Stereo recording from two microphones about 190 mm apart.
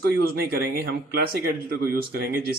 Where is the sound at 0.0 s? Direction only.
55° right (ahead or behind).